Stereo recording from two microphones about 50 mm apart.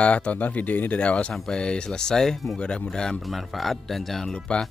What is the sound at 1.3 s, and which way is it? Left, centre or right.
Speech, centre.